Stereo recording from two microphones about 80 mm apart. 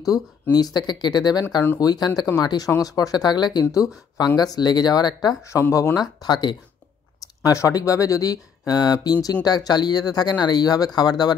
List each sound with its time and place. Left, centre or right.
0.0 s speech: left
3.6 s speech: left
4.4 s speech: left
5.4 s speech: left
7.4 s speech: left